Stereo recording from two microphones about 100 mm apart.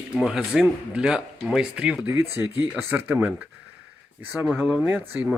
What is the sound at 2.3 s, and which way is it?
Speech, 25° right (ahead or behind).